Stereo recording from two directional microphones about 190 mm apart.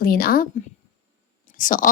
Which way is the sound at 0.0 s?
50° left (ahead or behind).